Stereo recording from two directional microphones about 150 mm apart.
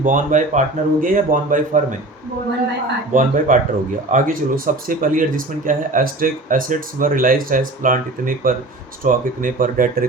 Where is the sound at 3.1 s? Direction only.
60° right (ahead or behind).